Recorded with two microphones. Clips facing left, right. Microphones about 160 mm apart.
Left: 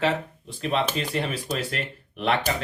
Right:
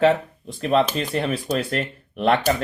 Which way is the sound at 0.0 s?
40° right (ahead or behind).